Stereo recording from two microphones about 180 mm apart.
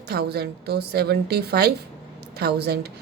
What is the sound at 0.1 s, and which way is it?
A woman's voice, 65° right (ahead or behind).